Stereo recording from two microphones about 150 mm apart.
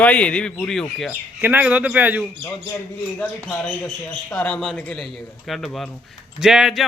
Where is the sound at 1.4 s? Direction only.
15° right (ahead or behind).